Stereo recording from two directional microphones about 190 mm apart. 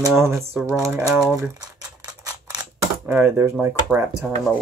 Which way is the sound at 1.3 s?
15° right (ahead or behind).